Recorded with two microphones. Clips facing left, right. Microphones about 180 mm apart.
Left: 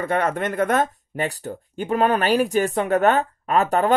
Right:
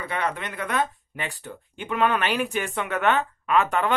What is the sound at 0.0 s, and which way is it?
Speech, 45° left (ahead or behind).